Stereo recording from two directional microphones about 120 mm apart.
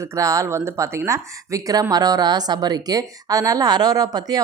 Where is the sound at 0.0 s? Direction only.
25° right (ahead or behind).